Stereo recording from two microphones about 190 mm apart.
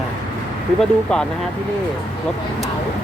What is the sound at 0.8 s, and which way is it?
Speech, 5° left (ahead or behind).